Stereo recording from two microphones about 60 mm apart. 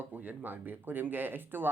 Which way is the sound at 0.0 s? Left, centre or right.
Right.